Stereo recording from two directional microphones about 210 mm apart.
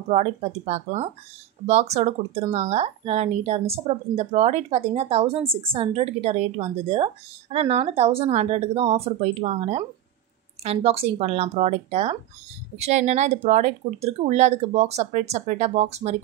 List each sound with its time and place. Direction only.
0.1 s speech: 30° right (ahead or behind)